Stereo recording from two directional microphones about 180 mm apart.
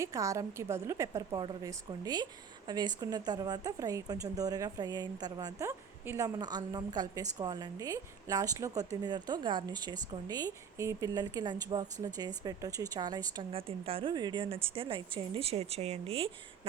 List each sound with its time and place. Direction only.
0.0 s a woman's voice: 15° right (ahead or behind); by 16.3 s 30° right (ahead or behind)